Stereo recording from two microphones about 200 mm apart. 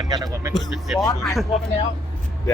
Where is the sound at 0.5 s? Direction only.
Centre (ahead or behind).